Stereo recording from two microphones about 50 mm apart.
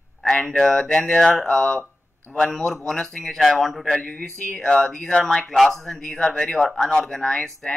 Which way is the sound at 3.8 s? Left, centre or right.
Centre.